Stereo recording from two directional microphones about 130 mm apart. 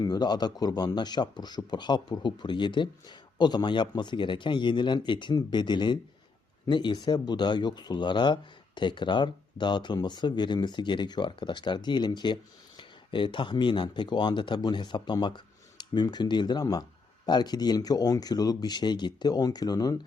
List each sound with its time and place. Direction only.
0.0 s speech: 30° left (ahead or behind)